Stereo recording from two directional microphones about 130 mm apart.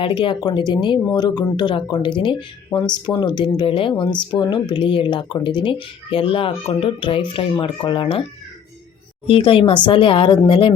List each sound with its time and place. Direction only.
0.0 s speech: 40° left (ahead or behind)
9.2 s speech: 45° left (ahead or behind)